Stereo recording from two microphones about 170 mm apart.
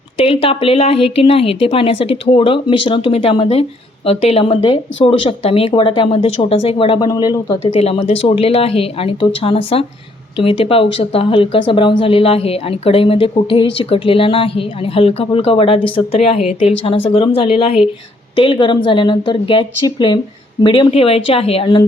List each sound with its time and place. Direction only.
0.2 s speech: 35° left (ahead or behind)
7.6 s a woman's voice: 40° left (ahead or behind)